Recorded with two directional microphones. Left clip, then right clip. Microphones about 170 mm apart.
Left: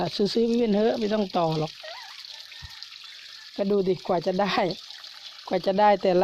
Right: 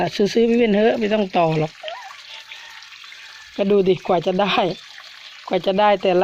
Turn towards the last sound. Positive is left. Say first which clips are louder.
# right 4 dB
turn(degrees=25)  # may be behind; listen again after turning